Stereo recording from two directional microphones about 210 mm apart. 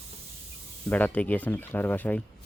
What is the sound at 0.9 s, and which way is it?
Speech, 5° left (ahead or behind).